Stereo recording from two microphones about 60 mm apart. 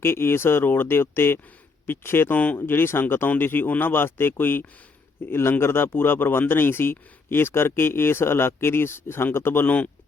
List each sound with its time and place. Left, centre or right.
0.0 s speech: left